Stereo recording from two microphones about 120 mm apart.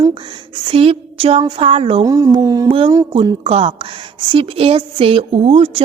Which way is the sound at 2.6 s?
50° right (ahead or behind).